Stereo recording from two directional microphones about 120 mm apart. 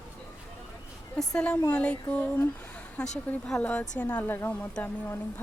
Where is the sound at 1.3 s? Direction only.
10° left (ahead or behind).